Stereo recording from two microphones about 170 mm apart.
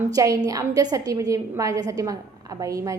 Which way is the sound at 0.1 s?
20° right (ahead or behind).